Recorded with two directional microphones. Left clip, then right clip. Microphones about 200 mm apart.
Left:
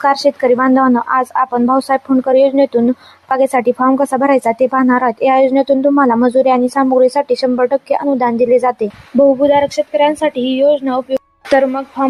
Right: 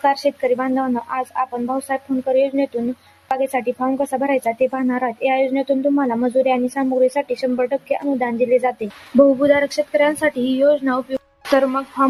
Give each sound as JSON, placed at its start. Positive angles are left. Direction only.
{"t": 0.0, "sound": "speech", "side_deg": 15}